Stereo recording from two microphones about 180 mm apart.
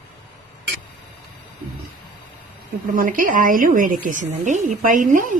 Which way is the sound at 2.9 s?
50° right (ahead or behind).